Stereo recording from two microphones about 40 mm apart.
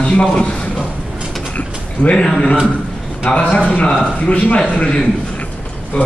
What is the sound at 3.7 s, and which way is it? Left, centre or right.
Speech, left.